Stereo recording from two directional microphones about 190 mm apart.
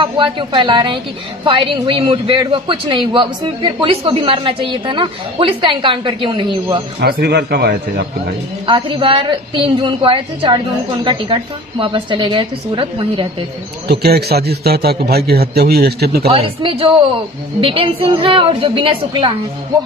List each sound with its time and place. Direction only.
0.0 s a man's voice: 25° right (ahead or behind)
7.0 s a man's voice: 55° right (ahead or behind)
8.6 s a man's voice: 25° right (ahead or behind)
13.8 s a man's voice: 55° right (ahead or behind)
16.3 s a man's voice: 30° right (ahead or behind)